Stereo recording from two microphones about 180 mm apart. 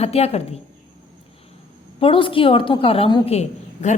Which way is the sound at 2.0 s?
30° left (ahead or behind).